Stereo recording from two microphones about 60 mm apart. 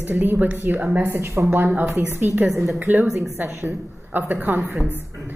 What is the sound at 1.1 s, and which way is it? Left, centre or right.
Speech, right.